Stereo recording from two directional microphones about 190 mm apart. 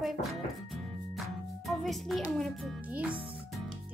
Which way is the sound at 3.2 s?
10° right (ahead or behind).